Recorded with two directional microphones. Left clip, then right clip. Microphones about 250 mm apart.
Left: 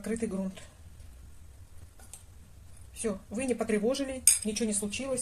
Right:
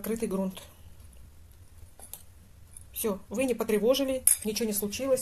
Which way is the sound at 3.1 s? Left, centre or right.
Right.